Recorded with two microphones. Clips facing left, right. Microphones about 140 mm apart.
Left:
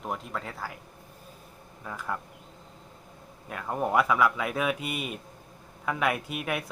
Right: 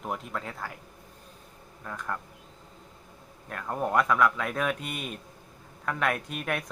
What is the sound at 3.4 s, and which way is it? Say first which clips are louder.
Speech: left 1 dB; 5° left (ahead or behind).